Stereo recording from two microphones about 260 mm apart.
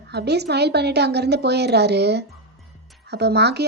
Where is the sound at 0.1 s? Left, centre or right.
Right.